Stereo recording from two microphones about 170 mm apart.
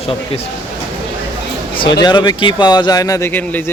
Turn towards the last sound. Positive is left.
turn(degrees=10)  # may be behind; listen again after turning